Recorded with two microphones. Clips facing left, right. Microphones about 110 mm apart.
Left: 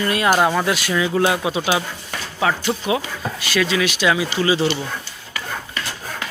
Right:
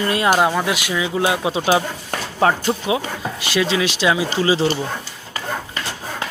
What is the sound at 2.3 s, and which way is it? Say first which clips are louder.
Speech: right 3 dB; 40° right (ahead or behind).